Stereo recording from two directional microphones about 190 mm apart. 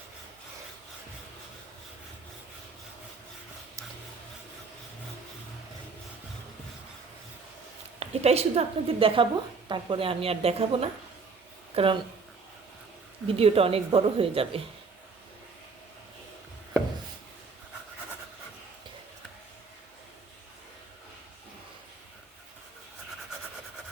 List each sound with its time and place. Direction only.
7.9 s a woman's voice: 35° right (ahead or behind)
13.2 s a woman's voice: 30° right (ahead or behind)